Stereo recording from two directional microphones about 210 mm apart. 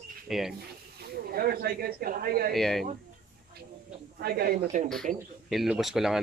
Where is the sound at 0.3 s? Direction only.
Centre (ahead or behind).